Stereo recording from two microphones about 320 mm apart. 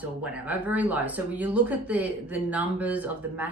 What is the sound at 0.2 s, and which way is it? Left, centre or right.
Speech, centre.